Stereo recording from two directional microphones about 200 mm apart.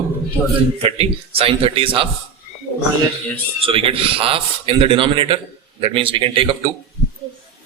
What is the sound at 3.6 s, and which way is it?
A man's voice, 25° right (ahead or behind).